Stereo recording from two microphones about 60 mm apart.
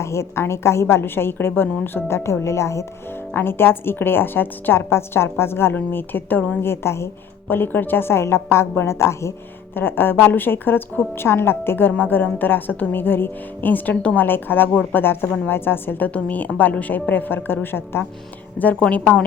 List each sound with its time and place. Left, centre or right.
0.0 s a woman's voice: left
2.0 s a woman's voice: left
3.3 s a woman's voice: left
6.6 s a woman's voice: left
7.4 s a woman's voice: left
9.7 s a woman's voice: left
13.9 s a woman's voice: centre
14.2 s a woman's voice: left
14.7 s a woman's voice: left
15.0 s a woman's voice: left
18.6 s a woman's voice: left